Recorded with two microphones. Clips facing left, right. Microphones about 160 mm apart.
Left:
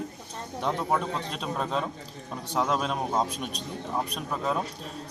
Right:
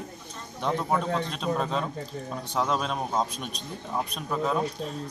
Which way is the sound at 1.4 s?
Centre (ahead or behind).